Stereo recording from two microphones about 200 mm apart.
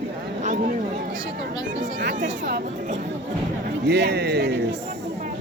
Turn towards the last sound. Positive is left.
turn(degrees=-55)  # may be behind; listen again after turning